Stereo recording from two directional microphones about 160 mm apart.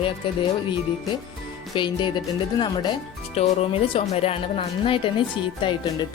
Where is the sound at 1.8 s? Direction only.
30° left (ahead or behind).